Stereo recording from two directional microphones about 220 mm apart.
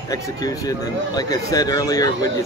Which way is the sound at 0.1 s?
15° left (ahead or behind).